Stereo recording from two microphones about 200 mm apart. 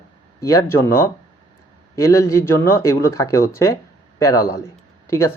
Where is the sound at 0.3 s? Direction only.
15° left (ahead or behind).